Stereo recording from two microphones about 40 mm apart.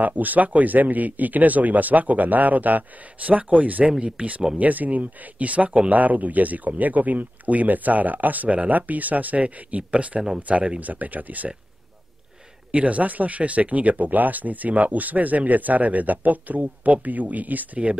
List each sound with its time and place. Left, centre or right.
0.0 s speech: right
10.8 s speech: right
12.7 s speech: right